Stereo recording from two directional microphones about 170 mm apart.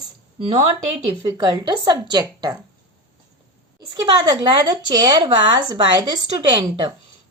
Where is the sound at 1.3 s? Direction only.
25° right (ahead or behind).